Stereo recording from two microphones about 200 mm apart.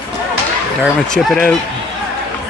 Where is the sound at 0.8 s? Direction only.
5° left (ahead or behind).